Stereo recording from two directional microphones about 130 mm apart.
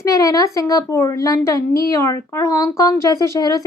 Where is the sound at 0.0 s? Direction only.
25° left (ahead or behind).